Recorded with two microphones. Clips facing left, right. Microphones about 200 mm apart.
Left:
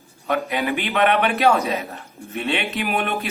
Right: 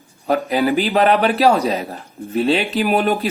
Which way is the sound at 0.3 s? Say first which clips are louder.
Right 5 dB; 35° right (ahead or behind).